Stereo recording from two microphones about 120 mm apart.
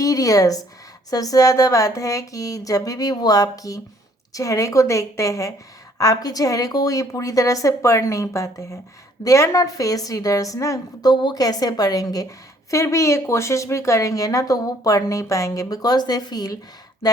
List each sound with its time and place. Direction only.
0.0 s speech: 30° left (ahead or behind)
11.1 s a woman's voice: 40° left (ahead or behind)